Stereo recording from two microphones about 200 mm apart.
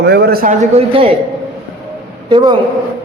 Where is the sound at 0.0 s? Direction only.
55° right (ahead or behind).